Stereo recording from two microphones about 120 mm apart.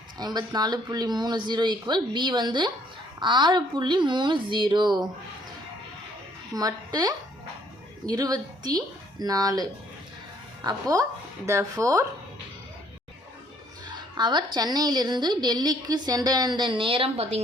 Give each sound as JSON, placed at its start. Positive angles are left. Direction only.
{"t": 0.2, "sound": "a woman's voice", "side_deg": -35}
{"t": 6.5, "sound": "a woman's voice", "side_deg": -30}
{"t": 13.9, "sound": "a woman's voice", "side_deg": -40}